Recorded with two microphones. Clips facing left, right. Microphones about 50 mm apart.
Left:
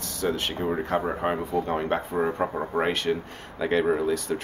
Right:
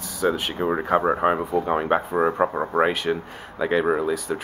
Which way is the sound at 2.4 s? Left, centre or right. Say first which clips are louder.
Right 5 dB; right.